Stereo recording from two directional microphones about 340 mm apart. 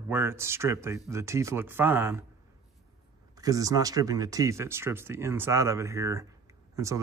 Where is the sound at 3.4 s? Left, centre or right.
Centre.